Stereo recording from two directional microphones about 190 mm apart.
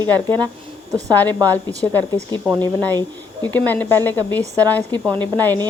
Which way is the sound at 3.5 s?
10° left (ahead or behind).